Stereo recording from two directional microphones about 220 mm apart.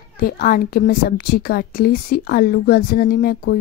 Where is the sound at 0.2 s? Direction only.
40° left (ahead or behind).